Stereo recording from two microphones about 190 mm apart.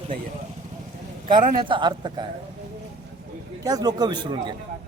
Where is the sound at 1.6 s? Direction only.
25° right (ahead or behind).